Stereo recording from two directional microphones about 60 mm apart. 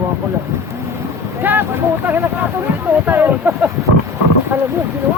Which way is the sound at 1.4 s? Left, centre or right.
Right.